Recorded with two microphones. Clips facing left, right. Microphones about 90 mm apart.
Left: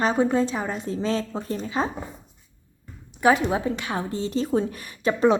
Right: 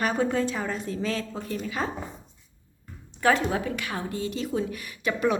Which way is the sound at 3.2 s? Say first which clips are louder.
Left 3 dB; 15° left (ahead or behind).